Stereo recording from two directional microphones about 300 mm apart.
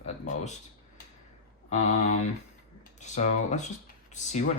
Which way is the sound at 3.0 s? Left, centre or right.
Left.